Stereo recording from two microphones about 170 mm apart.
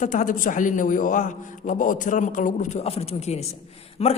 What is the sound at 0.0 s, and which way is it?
A man's voice, 50° left (ahead or behind).